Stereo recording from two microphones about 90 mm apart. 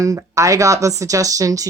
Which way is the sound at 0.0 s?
35° right (ahead or behind).